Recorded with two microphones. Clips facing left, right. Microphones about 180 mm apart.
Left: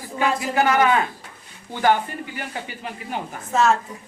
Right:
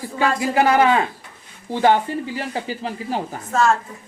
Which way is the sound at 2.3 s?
30° right (ahead or behind).